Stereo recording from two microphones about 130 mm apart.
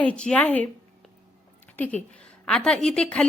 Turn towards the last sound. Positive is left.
turn(degrees=5)  # may be behind; listen again after turning